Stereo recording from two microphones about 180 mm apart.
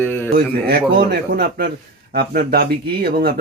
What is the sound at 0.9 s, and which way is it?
A man's voice, 60° right (ahead or behind).